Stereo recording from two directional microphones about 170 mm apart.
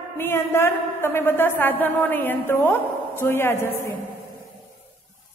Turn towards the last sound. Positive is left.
turn(degrees=15)  # may be behind; listen again after turning